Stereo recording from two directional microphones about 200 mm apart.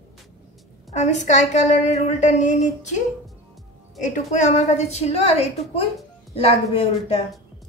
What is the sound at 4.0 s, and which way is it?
A woman's voice, 35° left (ahead or behind).